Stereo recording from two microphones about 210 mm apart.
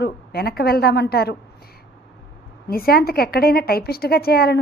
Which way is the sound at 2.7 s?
45° left (ahead or behind).